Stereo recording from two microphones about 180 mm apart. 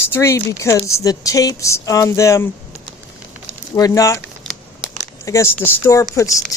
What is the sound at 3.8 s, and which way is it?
Speech, 20° left (ahead or behind).